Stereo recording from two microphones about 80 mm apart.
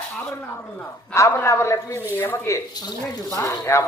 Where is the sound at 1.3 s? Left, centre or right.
Left.